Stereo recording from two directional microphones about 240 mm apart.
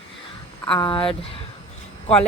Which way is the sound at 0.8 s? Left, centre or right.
Left.